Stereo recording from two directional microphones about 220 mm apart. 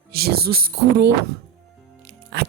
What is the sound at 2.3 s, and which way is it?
Speech, 50° right (ahead or behind).